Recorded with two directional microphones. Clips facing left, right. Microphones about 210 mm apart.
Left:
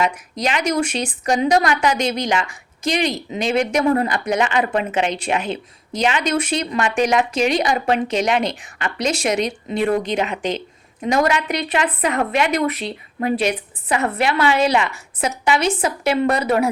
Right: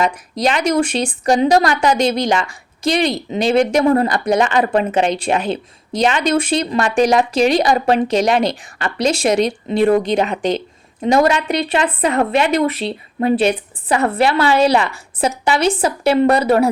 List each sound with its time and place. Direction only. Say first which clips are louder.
0.0 s a woman's voice: right 4 dB; 35° right (ahead or behind)